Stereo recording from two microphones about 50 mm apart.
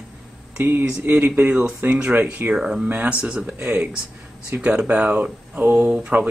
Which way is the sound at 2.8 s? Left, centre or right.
Right.